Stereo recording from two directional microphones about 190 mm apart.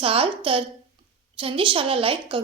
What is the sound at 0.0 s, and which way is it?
A woman's voice, 30° right (ahead or behind).